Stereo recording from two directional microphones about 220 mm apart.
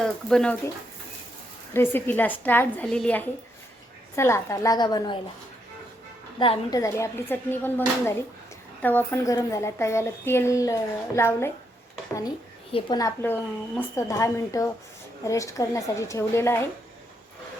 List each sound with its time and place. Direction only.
0.0 s speech: 5° left (ahead or behind)
1.7 s a woman's voice: 10° left (ahead or behind)
6.4 s a woman's voice: 20° left (ahead or behind)
12.7 s a woman's voice: 15° left (ahead or behind)